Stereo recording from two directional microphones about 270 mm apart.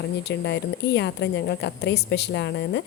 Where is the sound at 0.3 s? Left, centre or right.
Left.